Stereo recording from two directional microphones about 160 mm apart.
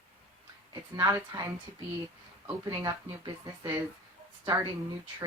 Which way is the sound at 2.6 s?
20° right (ahead or behind).